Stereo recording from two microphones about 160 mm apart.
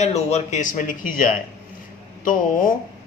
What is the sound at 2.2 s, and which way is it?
Speech, 55° left (ahead or behind).